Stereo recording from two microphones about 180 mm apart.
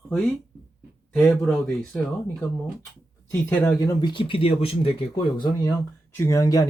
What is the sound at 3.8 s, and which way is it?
Speech, 20° left (ahead or behind).